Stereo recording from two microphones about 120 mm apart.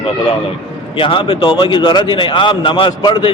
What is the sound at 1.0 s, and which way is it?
A man's voice, 45° left (ahead or behind).